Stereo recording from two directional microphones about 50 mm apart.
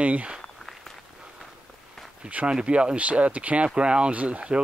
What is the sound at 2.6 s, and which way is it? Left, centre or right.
Speech, centre.